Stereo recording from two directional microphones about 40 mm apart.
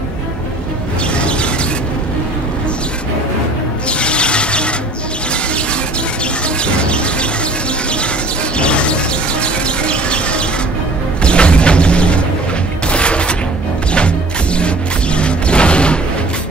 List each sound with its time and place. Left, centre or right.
1.1 s a sound: left
3.9 s squeal: left
6.6 s bird: left
8.5 s music: left
9.4 s a sound: left
12.8 s fusillade: left
13.9 s music: left